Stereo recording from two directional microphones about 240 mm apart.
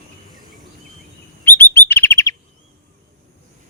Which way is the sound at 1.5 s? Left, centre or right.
Centre.